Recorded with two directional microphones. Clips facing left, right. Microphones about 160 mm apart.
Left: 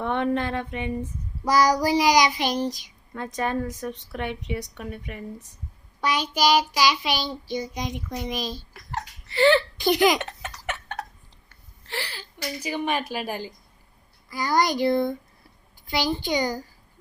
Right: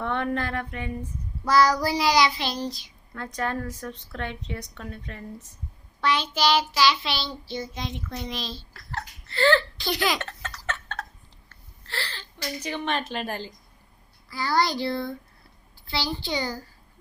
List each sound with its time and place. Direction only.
0.0 s a woman's voice: 20° left (ahead or behind)
6.0 s child singing: 10° left (ahead or behind)
11.4 s a woman's voice: 15° left (ahead or behind)